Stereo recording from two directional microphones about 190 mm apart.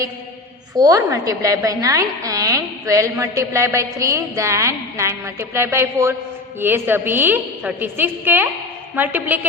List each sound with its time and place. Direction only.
0.8 s a woman's voice: 20° right (ahead or behind)